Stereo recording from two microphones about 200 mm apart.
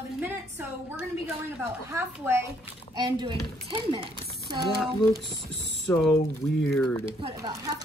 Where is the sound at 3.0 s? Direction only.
25° right (ahead or behind).